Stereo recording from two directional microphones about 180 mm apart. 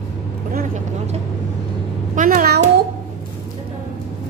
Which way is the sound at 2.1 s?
50° right (ahead or behind).